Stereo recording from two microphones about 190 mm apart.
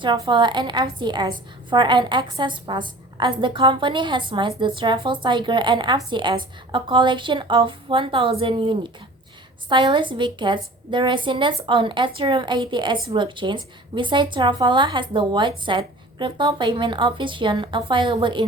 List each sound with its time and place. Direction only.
0.3 s a woman's voice: 25° right (ahead or behind)